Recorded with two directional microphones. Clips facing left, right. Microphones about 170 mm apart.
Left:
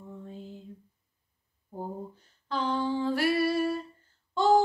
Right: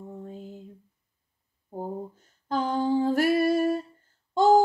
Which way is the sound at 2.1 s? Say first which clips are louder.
Right 5 dB; 45° right (ahead or behind).